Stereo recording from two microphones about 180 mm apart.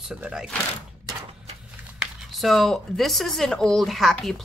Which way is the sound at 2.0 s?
Centre (ahead or behind).